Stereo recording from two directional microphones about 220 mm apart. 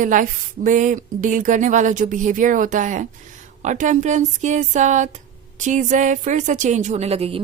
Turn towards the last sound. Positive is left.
turn(degrees=-25)  # may be behind; listen again after turning